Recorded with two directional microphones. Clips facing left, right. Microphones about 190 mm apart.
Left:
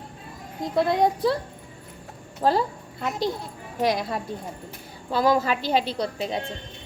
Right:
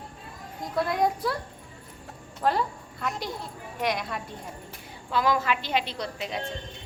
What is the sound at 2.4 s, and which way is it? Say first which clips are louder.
A woman's voice: left 4 dB; 30° left (ahead or behind).